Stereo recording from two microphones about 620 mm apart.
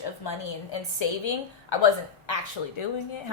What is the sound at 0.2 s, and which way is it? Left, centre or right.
Speech, left.